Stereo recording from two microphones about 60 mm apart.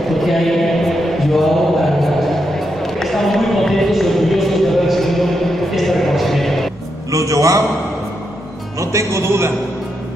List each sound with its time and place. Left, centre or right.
0.1 s chant: centre
2.8 s a sound: centre
7.1 s a man's voice: right
8.7 s speech: right